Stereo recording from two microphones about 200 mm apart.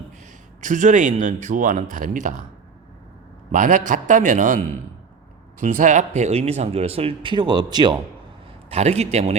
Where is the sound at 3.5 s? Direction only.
40° right (ahead or behind); by 7.9 s 20° right (ahead or behind).